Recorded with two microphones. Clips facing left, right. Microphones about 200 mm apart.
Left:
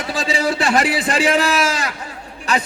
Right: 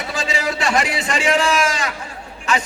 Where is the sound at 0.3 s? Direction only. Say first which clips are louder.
Left 3 dB; centre (ahead or behind).